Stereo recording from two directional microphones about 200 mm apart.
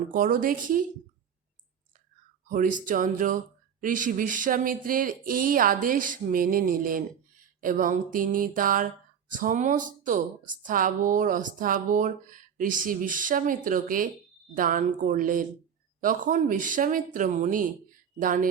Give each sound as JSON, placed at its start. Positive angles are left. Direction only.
{"t": 0.1, "sound": "speech", "side_deg": -45}
{"t": 2.5, "sound": "speech", "side_deg": -40}